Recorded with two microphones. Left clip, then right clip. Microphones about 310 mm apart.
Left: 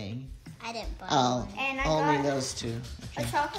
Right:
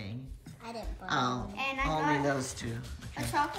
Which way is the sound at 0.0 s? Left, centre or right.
Centre.